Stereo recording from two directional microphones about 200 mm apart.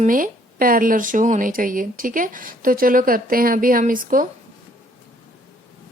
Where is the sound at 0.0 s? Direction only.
45° right (ahead or behind).